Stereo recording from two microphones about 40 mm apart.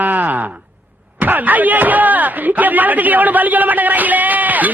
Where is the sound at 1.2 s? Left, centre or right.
Right.